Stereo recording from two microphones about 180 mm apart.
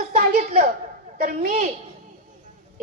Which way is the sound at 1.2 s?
50° right (ahead or behind).